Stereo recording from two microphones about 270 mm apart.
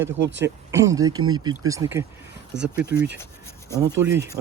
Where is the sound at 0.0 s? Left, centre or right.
Right.